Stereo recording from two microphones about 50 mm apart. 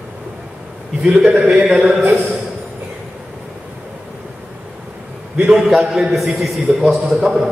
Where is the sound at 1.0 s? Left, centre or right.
Centre.